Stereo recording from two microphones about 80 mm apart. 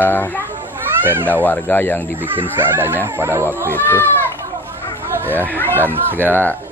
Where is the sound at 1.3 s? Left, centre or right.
Left.